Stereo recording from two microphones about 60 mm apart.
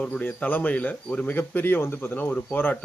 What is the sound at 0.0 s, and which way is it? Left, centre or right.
Speech, centre.